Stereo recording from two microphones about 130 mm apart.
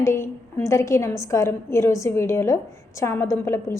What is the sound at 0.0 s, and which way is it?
A woman's voice, 20° left (ahead or behind).